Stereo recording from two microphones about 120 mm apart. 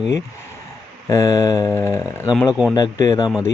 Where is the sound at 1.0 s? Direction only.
25° left (ahead or behind).